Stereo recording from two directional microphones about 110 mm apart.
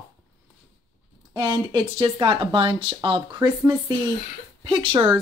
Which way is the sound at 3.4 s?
35° right (ahead or behind).